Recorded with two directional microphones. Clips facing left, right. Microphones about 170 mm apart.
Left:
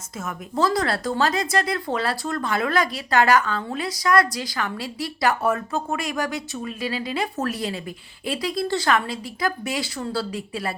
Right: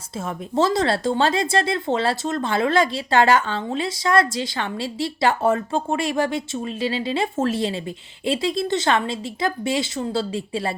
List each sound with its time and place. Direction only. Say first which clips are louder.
0.2 s speech: right 3 dB; 25° right (ahead or behind)